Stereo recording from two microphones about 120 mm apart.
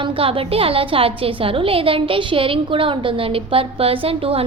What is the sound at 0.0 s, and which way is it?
A woman's voice, 50° right (ahead or behind).